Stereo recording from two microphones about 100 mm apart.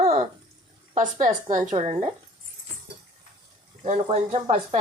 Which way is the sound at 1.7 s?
90° right.